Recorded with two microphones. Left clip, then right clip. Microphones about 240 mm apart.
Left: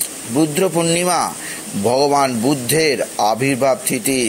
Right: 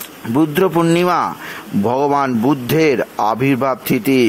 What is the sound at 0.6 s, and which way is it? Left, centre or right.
Speech, right.